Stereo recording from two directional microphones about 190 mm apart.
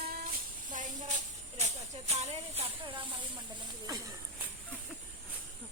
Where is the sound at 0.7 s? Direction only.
40° right (ahead or behind).